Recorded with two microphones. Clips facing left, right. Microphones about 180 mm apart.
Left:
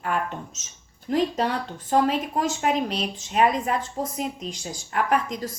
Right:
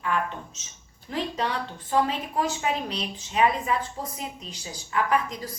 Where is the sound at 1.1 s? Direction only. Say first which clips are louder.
Left 5 dB; 45° left (ahead or behind).